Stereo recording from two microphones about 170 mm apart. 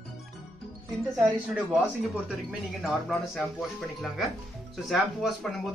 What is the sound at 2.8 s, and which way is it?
Speech, centre (ahead or behind).